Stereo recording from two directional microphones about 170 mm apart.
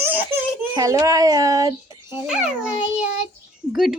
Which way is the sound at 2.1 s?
5° right (ahead or behind).